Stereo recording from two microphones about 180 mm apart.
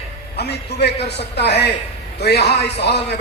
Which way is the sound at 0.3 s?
65° left (ahead or behind).